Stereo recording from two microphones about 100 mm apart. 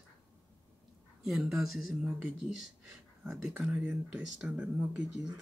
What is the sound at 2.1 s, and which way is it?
Speech, 15° right (ahead or behind).